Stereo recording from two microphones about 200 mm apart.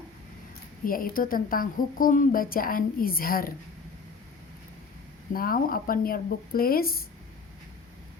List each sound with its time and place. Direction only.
0.9 s a woman's voice: 45° left (ahead or behind)
5.3 s a woman's voice: 45° left (ahead or behind)